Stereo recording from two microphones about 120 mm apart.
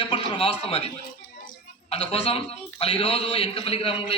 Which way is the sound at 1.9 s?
50° left (ahead or behind).